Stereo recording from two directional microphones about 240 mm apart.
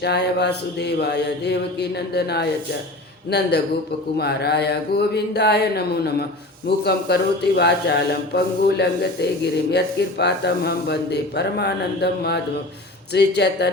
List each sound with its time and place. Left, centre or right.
0.0 s speech: left